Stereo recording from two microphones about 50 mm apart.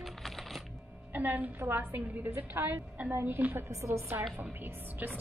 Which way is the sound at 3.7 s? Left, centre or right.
Right.